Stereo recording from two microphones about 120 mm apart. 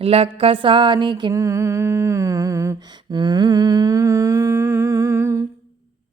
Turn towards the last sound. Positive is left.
turn(degrees=-25)  # may be behind; listen again after turning